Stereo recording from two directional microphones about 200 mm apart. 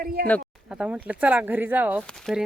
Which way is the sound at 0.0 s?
50° right (ahead or behind).